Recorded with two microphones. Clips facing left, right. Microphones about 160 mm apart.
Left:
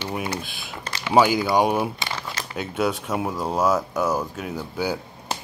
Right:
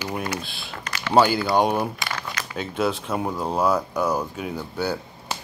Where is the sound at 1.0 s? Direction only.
10° left (ahead or behind).